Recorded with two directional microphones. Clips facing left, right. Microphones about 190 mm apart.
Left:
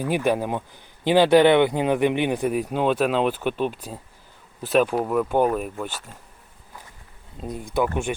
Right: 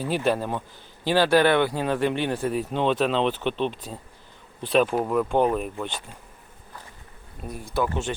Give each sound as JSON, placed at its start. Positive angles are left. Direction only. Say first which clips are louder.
{"t": 0.0, "sound": "speech", "louder": "left 2 dB", "side_deg": 15}
{"t": 7.4, "sound": "speech", "louder": "left 3 dB", "side_deg": 20}